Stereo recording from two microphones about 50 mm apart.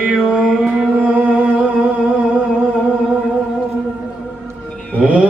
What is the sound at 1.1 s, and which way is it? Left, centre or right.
Music, right.